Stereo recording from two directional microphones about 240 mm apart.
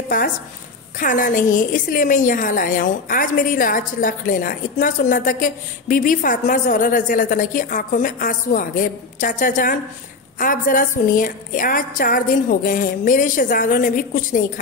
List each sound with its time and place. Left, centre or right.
0.9 s a woman's voice: left